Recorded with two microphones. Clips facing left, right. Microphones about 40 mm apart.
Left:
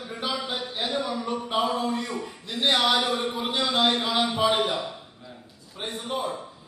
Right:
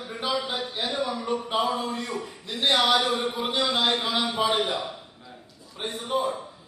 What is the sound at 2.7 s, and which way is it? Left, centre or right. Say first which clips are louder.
Speech: right 2 dB; right.